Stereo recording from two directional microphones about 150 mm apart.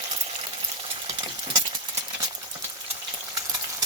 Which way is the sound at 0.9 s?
35° right (ahead or behind).